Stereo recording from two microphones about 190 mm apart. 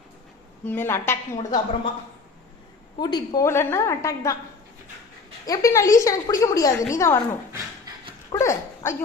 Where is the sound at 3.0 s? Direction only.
20° left (ahead or behind).